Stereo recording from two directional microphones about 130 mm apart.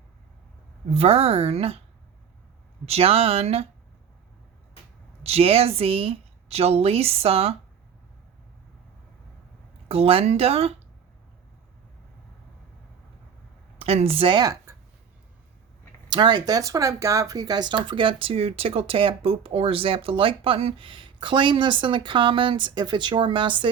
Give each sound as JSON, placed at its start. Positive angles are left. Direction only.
{"t": 0.9, "sound": "speech", "side_deg": -50}
{"t": 2.8, "sound": "speech", "side_deg": -50}
{"t": 5.2, "sound": "speech", "side_deg": -50}
{"t": 9.9, "sound": "speech", "side_deg": -50}
{"t": 13.7, "sound": "speech", "side_deg": -50}
{"t": 16.0, "sound": "speech", "side_deg": -35}